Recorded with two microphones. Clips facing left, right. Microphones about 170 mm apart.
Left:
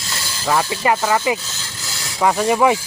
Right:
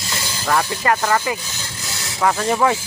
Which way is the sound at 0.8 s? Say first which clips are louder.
Left 3 dB; 15° left (ahead or behind).